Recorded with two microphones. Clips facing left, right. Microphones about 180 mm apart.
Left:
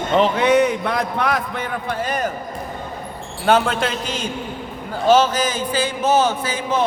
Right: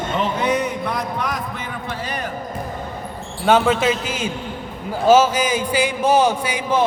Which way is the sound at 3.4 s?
Centre (ahead or behind).